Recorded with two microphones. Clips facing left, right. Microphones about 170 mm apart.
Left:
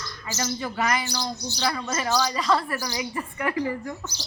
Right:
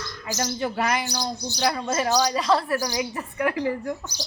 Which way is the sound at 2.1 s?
15° right (ahead or behind).